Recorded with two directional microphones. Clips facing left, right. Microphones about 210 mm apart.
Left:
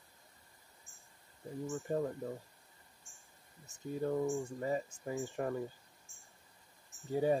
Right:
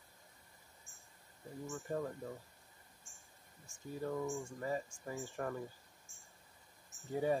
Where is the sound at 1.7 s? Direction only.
25° left (ahead or behind).